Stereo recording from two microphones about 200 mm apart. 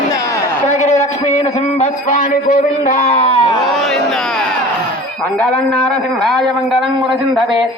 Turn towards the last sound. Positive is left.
turn(degrees=0)  # may be behind; listen again after turning